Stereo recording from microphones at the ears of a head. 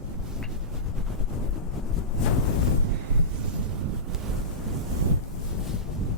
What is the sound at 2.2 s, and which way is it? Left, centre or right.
Wind noise, left.